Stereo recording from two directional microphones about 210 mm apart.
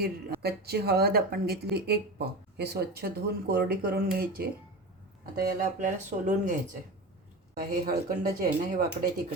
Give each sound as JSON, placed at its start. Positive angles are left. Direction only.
{"t": 0.0, "sound": "speech", "side_deg": -50}
{"t": 7.6, "sound": "speech", "side_deg": -45}